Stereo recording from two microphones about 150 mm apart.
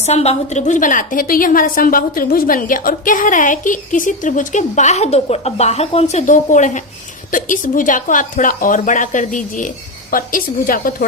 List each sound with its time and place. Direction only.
0.0 s a woman's voice: 45° left (ahead or behind); by 10.9 s 70° left (ahead or behind)